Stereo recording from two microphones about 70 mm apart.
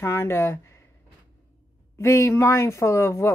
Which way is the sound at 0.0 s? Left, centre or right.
Left.